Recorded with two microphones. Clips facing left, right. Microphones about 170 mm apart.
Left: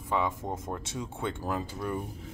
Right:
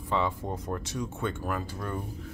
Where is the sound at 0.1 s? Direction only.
15° left (ahead or behind).